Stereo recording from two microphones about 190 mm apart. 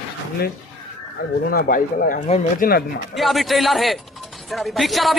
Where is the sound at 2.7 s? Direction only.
55° left (ahead or behind).